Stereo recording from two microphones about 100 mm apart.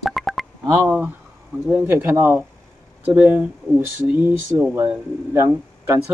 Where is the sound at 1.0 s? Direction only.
20° right (ahead or behind).